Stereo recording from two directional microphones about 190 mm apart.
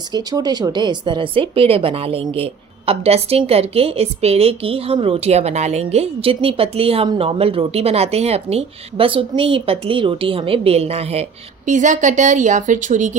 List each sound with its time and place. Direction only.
0.1 s a woman's voice: 20° right (ahead or behind); by 13.1 s 40° right (ahead or behind)